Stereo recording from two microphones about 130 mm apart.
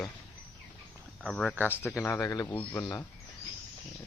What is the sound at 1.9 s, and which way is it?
Speech, 20° left (ahead or behind).